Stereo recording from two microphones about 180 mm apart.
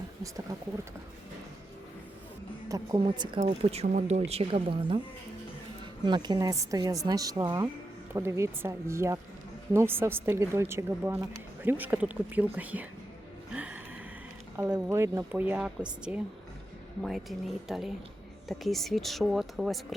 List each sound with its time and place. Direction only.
2.6 s a woman's voice: 20° right (ahead or behind)
3.4 s a woman's voice: 35° right (ahead or behind); by 12.9 s 10° right (ahead or behind)
13.5 s a sound: 5° right (ahead or behind)
14.6 s speech: 15° right (ahead or behind)